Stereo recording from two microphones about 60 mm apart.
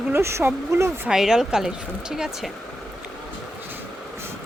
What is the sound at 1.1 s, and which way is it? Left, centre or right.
Speech, centre.